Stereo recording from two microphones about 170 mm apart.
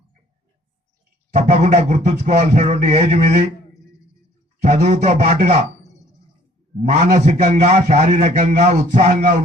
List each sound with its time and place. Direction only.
1.6 s a man's voice: 45° right (ahead or behind)
4.6 s a man's voice: 45° right (ahead or behind)
6.9 s a man's voice: 45° right (ahead or behind)